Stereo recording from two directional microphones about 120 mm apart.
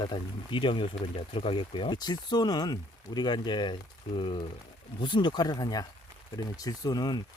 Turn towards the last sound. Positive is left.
turn(degrees=35)  # may be behind; listen again after turning